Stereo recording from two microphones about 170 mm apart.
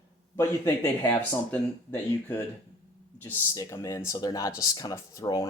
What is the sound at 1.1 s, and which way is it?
Speech, 10° left (ahead or behind).